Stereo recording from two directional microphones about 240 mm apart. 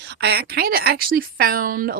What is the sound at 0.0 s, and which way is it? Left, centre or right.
Speech, right.